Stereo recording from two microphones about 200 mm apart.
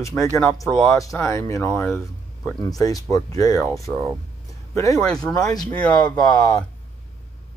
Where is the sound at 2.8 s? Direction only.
15° left (ahead or behind).